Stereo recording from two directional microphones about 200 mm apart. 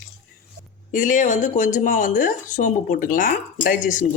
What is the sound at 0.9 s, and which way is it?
Speech, 40° left (ahead or behind).